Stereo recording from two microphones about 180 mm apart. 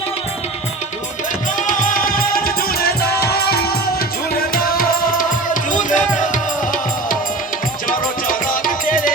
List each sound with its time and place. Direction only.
1.5 s music: 45° left (ahead or behind)